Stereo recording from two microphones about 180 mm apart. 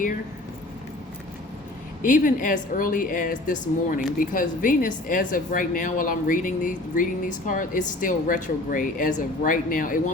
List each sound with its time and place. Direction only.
2.0 s speech: 45° left (ahead or behind)